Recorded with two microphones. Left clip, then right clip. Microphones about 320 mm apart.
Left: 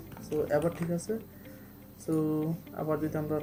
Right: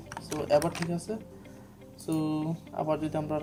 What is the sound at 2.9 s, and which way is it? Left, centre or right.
Speech, right.